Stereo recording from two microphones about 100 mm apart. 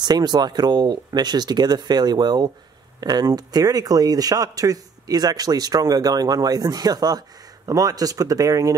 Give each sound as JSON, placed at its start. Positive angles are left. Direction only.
{"t": 0.0, "sound": "speech", "side_deg": -45}